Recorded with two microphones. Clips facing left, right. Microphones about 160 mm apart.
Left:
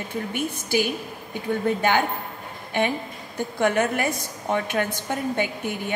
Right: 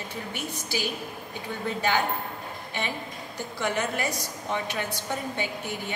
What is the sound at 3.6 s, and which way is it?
A woman's voice, 55° left (ahead or behind).